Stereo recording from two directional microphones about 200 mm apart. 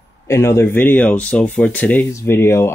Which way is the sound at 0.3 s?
15° left (ahead or behind).